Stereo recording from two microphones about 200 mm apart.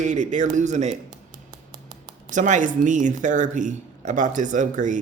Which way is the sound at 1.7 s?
20° right (ahead or behind).